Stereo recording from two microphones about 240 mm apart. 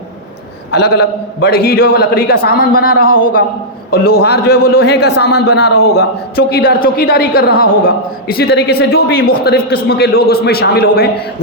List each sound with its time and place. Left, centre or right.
0.7 s a woman's voice: left
5.8 s a man's voice: left
6.3 s a woman's voice: left